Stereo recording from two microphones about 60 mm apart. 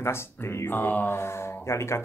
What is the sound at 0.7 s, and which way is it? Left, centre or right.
Speech, left.